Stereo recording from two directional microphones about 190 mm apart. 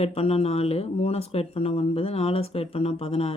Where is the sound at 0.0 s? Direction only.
30° left (ahead or behind).